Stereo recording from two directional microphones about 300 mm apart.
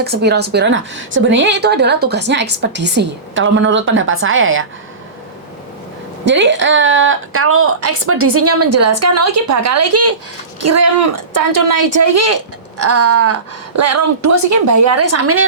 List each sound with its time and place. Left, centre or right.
0.0 s a woman's voice: right
6.2 s a woman's voice: right